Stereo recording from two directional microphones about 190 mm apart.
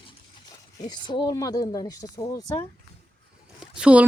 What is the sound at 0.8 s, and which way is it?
Speech, 25° left (ahead or behind).